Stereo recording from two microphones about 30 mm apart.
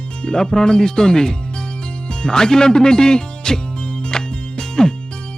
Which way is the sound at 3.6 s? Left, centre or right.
Left.